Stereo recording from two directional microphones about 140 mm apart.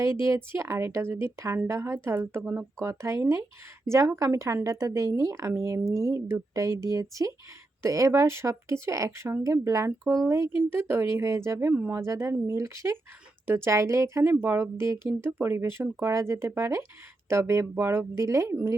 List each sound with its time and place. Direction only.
0.0 s speech: 20° right (ahead or behind)